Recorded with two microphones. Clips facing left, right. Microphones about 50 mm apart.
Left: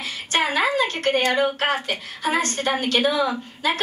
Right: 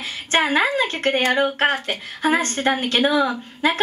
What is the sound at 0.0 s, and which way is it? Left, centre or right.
A woman's voice, right.